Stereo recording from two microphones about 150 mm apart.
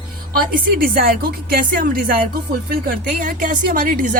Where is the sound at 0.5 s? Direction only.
75° right (ahead or behind).